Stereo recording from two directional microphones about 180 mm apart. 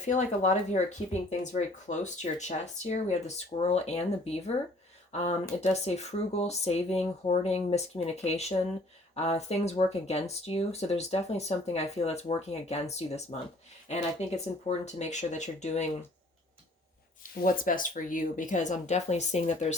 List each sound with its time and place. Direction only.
0.0 s speech: 40° left (ahead or behind)
17.4 s speech: 50° left (ahead or behind)